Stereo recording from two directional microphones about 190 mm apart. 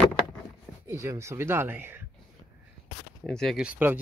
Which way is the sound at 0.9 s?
15° right (ahead or behind).